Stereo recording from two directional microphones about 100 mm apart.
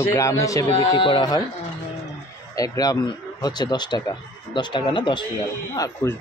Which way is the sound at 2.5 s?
35° left (ahead or behind).